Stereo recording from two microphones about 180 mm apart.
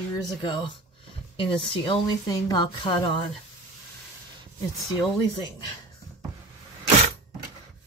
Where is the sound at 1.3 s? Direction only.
30° left (ahead or behind).